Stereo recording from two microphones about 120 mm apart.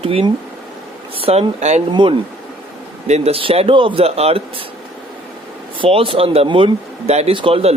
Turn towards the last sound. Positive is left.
turn(degrees=-50)  # may be behind; listen again after turning